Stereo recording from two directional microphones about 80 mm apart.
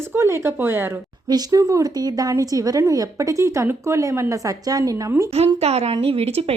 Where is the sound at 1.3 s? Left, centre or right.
Right.